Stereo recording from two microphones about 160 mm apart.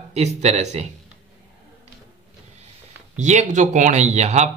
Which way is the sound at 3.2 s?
45° right (ahead or behind).